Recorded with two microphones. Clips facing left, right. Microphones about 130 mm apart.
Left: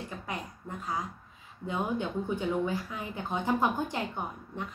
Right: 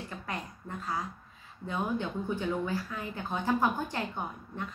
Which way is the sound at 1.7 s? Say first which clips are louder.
Left 1 dB; 20° left (ahead or behind).